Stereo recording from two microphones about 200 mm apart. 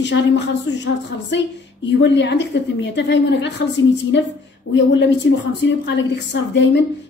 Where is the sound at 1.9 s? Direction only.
60° left (ahead or behind).